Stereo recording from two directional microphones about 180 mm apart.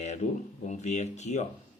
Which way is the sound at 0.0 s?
40° left (ahead or behind).